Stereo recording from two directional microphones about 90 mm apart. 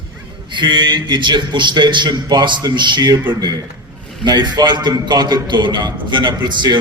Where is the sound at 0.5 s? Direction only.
60° right (ahead or behind).